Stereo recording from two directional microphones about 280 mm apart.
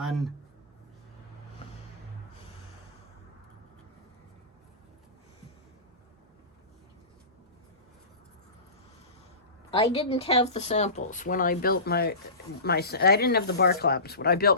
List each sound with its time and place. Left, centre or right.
0.0 s speech: centre
9.7 s speech: left